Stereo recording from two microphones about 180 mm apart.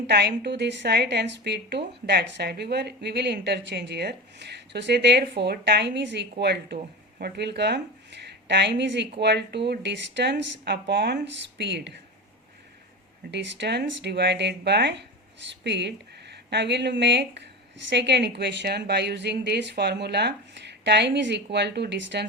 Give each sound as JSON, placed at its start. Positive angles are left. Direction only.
{"t": 0.1, "sound": "speech", "side_deg": -65}
{"t": 13.3, "sound": "speech", "side_deg": -80}